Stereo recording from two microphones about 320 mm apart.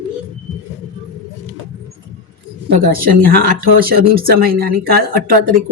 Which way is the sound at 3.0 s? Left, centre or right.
Right.